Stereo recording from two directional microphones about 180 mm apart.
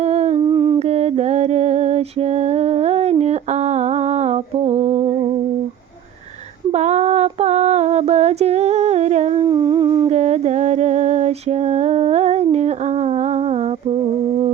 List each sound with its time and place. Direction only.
0.0 s humming: 35° right (ahead or behind)
0.3 s humming: 25° right (ahead or behind)
0.8 s mantra: 35° right (ahead or behind)
6.7 s female singing: 40° right (ahead or behind)
9.5 s humming: 25° right (ahead or behind)
10.1 s a sound: 40° right (ahead or behind)